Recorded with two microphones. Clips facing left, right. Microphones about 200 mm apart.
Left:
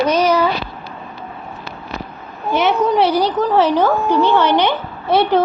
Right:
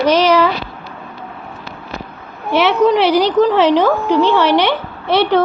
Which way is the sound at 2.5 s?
75° right (ahead or behind).